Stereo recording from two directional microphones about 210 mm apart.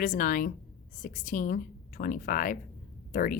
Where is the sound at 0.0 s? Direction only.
40° left (ahead or behind).